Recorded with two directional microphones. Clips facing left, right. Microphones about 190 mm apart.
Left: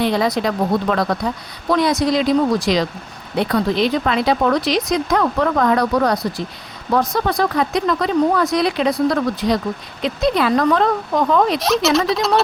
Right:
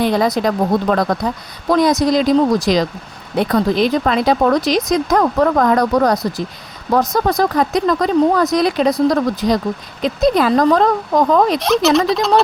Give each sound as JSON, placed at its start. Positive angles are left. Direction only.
{"t": 0.0, "sound": "speech", "side_deg": -45}
{"t": 11.6, "sound": "speech", "side_deg": 0}